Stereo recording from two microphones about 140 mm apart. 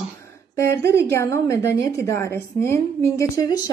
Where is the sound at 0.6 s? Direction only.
20° left (ahead or behind).